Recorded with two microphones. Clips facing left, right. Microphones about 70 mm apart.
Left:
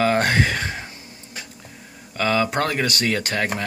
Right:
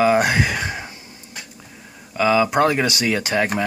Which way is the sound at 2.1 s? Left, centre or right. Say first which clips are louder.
Right 4 dB; centre.